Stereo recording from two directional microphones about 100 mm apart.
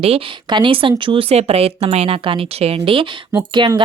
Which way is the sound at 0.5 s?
60° right (ahead or behind).